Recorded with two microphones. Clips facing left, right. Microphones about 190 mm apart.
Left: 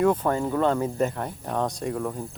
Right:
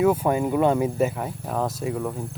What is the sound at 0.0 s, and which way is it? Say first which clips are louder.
Speech: right 2 dB; 10° right (ahead or behind).